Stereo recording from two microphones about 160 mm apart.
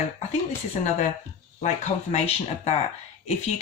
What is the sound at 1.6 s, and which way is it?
Speech, 45° left (ahead or behind).